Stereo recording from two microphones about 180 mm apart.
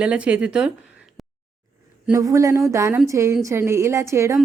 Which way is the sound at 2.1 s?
20° right (ahead or behind).